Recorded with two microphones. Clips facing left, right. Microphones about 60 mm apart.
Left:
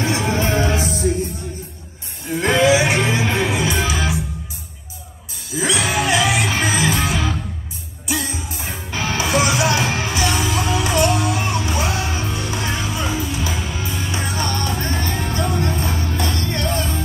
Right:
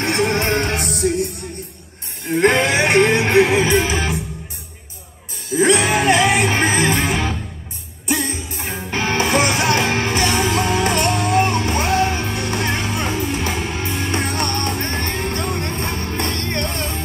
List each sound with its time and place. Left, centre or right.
0.0 s music: right
2.2 s music: right
3.5 s music: right
5.6 s music: right